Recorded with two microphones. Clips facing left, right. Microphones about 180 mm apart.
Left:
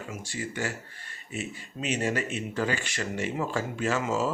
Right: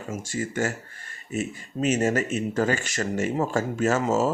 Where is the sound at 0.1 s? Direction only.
45° right (ahead or behind).